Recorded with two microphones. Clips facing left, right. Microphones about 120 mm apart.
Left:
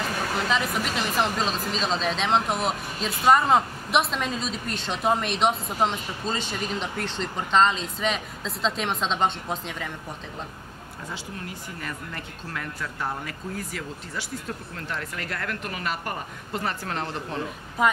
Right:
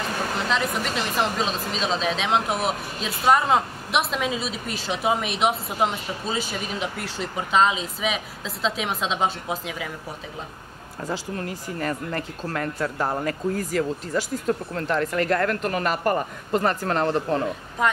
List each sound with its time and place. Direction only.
0.5 s speech: centre (ahead or behind)
11.1 s speech: 45° right (ahead or behind)
17.8 s speech: 5° left (ahead or behind)